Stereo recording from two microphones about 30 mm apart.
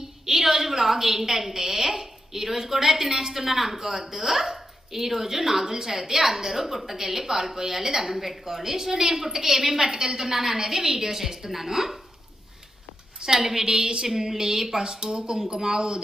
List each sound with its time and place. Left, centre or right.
0.3 s a woman's voice: centre
13.1 s a woman's voice: centre